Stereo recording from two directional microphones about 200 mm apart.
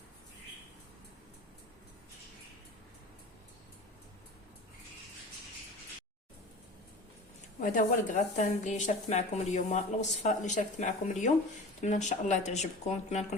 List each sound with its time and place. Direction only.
7.6 s speech: 40° left (ahead or behind)